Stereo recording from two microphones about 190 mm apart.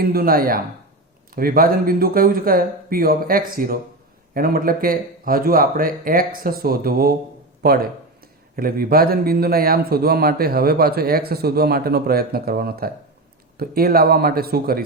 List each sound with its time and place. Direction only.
0.0 s a man's voice: 50° right (ahead or behind)